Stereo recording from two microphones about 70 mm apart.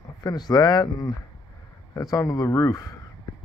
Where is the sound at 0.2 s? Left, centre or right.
Left.